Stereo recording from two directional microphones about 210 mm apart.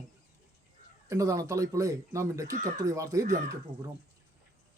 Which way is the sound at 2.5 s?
40° right (ahead or behind).